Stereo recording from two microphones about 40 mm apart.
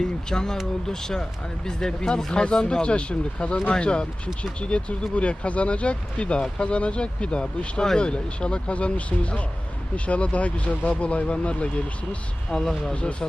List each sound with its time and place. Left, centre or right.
0.0 s speech: centre